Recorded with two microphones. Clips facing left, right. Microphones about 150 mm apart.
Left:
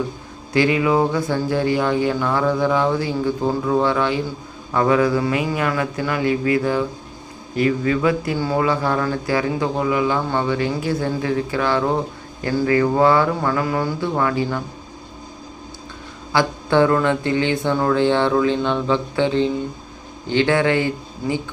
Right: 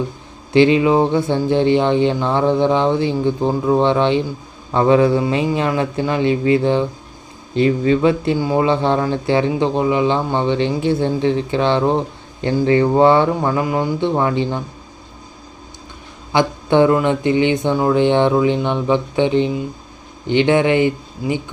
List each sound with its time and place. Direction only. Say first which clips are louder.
0.5 s speech: right 5 dB; 25° right (ahead or behind)
16.3 s speech: right 3 dB; 20° right (ahead or behind)